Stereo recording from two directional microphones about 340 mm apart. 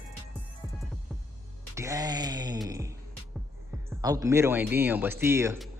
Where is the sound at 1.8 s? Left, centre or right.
Centre.